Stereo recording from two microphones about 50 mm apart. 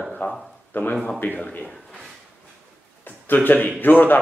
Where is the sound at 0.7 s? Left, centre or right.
Left.